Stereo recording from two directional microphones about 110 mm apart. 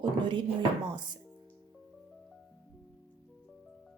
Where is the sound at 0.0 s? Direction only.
50° right (ahead or behind).